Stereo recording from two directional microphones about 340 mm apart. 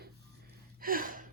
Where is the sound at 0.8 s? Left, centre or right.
Right.